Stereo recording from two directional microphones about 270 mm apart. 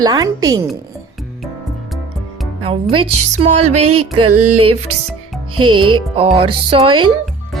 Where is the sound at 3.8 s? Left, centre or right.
Right.